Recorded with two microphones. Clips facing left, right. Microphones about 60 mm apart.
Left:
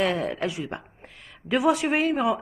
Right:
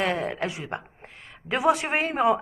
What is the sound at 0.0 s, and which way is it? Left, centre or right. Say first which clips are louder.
A woman's voice: left 1 dB; right.